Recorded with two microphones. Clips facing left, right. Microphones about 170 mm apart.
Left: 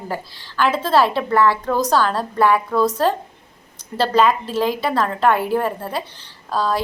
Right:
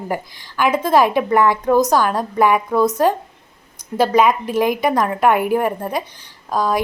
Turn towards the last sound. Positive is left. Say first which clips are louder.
# right 2 dB
turn(degrees=-15)  # may be behind; listen again after turning